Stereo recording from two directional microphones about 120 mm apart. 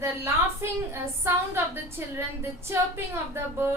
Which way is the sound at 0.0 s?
20° right (ahead or behind).